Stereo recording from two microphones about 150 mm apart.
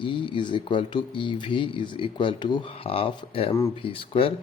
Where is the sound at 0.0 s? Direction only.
35° left (ahead or behind).